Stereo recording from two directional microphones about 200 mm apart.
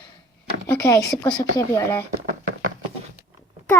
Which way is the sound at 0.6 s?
15° left (ahead or behind).